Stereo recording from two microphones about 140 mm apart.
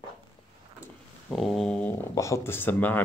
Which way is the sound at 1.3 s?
Centre (ahead or behind).